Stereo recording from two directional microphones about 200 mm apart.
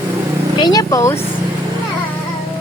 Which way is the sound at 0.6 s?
20° left (ahead or behind).